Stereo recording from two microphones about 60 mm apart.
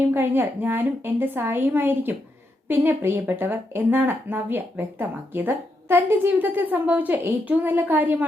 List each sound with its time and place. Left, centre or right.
0.0 s speech: right